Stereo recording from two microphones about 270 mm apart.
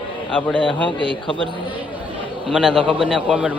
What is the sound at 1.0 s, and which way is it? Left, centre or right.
Speech, centre.